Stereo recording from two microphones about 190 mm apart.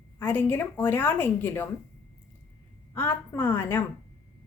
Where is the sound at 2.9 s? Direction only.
10° left (ahead or behind).